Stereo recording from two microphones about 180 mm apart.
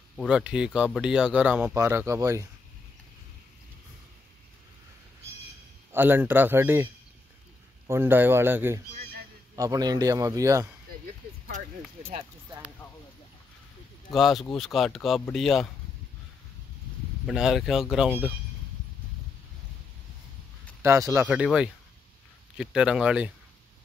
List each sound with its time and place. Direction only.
0.1 s speech: centre (ahead or behind); by 2.4 s 15° right (ahead or behind)
5.9 s a man's voice: 10° right (ahead or behind)
12.2 s speech: 20° right (ahead or behind)
14.1 s speech: centre (ahead or behind)
17.3 s speech: centre (ahead or behind)
20.8 s speech: 15° right (ahead or behind)
21.3 s speech: 5° right (ahead or behind)